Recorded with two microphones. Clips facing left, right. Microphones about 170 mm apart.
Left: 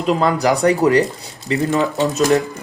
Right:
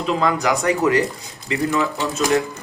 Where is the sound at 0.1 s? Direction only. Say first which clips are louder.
Left 4 dB; 35° left (ahead or behind).